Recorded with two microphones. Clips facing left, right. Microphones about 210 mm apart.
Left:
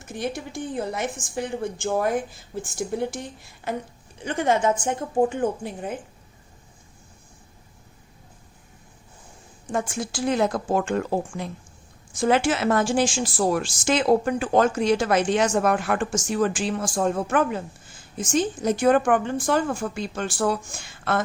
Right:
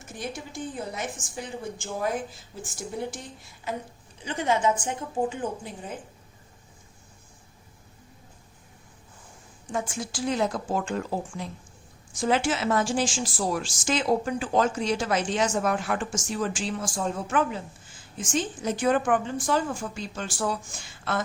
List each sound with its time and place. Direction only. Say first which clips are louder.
0.2 s a woman's voice: left 5 dB; 65° left (ahead or behind)
4.2 s a woman's voice: left 3 dB; 55° left (ahead or behind)
9.7 s a woman's voice: left 4 dB; 60° left (ahead or behind)
18.2 s a woman's voice: left 5 dB; 40° left (ahead or behind); by 20.6 s 60° left (ahead or behind)